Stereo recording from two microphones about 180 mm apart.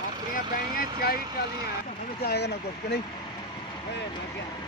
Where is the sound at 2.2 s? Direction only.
65° left (ahead or behind).